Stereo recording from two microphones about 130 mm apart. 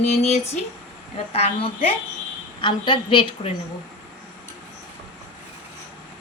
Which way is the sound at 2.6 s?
40° left (ahead or behind).